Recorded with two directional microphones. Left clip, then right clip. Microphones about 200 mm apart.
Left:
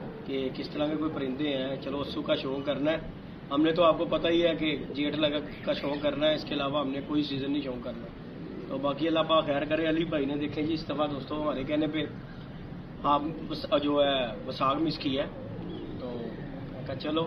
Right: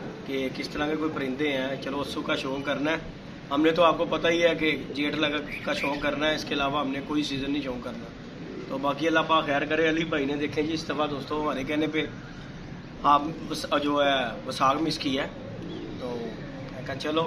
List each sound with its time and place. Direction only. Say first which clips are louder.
0.3 s a man's voice: right 2 dB; 15° right (ahead or behind)
8.8 s a man's voice: right 3 dB; 15° right (ahead or behind)